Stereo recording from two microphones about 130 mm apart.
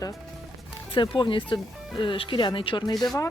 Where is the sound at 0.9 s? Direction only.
40° left (ahead or behind).